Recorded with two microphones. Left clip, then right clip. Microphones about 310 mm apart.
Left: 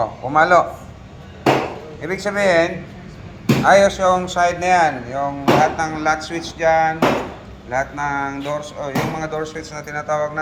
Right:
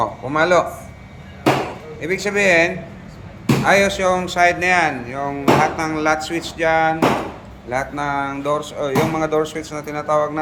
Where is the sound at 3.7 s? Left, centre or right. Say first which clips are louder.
Left 3 dB; centre.